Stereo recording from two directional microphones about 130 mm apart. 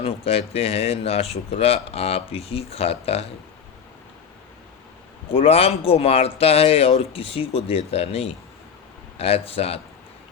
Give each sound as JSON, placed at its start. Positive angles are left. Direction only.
{"t": 0.0, "sound": "speech", "side_deg": 50}
{"t": 5.3, "sound": "speech", "side_deg": 50}